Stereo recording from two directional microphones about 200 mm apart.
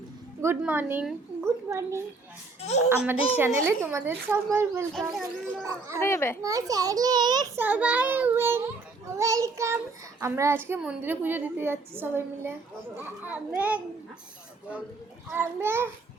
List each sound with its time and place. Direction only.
0.4 s a woman's voice: 10° right (ahead or behind)
2.6 s speech: 35° left (ahead or behind)
3.3 s a woman's voice: 10° right (ahead or behind)
4.9 s speech: centre (ahead or behind)
6.0 s a child's voice: 10° left (ahead or behind)
6.4 s a woman's voice: 15° right (ahead or behind)
15.3 s a woman's voice: 10° right (ahead or behind)